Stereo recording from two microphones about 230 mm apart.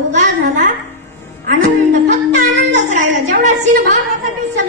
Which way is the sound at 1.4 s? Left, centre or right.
Right.